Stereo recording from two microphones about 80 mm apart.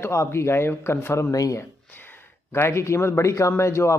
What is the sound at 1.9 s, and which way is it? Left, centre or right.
Speech, left.